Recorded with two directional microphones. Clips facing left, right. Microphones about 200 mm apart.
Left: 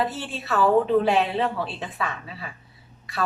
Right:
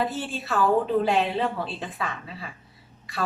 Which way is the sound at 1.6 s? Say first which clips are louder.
Left 1 dB; centre (ahead or behind).